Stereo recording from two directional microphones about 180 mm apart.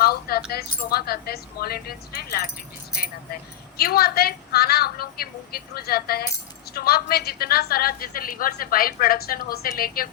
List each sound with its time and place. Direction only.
0.0 s a woman's voice: 60° left (ahead or behind)
3.8 s a woman's voice: 60° left (ahead or behind)